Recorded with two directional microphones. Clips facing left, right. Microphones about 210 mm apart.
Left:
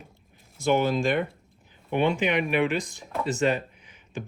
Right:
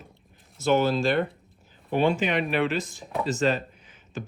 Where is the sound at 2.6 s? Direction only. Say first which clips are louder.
Left 1 dB; 15° left (ahead or behind).